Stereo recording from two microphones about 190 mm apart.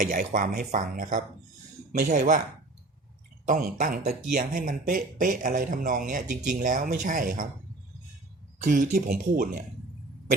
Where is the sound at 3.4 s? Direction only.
45° right (ahead or behind).